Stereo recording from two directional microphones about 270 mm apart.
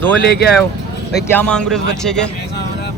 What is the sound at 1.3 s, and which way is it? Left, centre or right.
Speech, centre.